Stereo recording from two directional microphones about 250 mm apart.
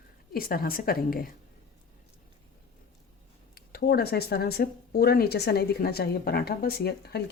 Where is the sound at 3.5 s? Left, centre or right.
Left.